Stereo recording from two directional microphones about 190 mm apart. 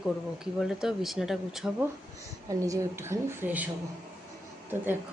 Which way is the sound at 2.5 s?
15° right (ahead or behind).